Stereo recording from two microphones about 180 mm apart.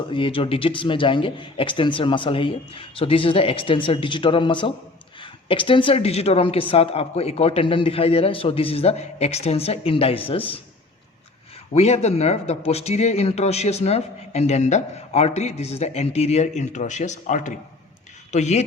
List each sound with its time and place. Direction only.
0.1 s speech: 30° left (ahead or behind)
11.7 s speech: 35° left (ahead or behind)